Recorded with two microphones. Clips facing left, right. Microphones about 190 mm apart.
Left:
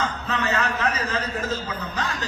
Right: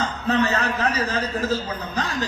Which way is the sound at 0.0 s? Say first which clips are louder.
Right 5 dB; 35° right (ahead or behind).